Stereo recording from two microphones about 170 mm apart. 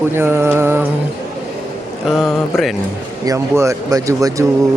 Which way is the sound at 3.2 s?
20° right (ahead or behind).